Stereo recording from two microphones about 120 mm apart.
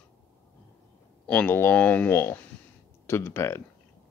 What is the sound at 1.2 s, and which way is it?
A man's voice, 10° left (ahead or behind).